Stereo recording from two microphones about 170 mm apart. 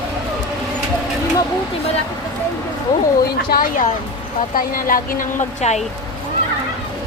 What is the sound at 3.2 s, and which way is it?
Speech, 60° left (ahead or behind).